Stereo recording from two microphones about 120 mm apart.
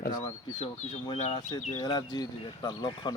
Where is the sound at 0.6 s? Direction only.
70° left (ahead or behind).